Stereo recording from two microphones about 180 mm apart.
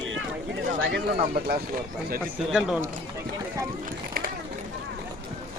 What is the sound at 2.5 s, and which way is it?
Speech, 5° right (ahead or behind).